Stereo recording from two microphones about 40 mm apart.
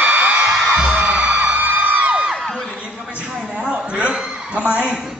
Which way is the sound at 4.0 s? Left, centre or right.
Right.